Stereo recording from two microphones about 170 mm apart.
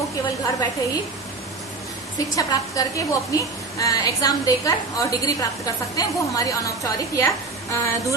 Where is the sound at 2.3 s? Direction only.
20° left (ahead or behind).